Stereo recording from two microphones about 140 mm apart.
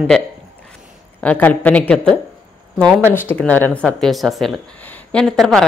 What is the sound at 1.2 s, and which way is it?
A woman's voice, 10° left (ahead or behind).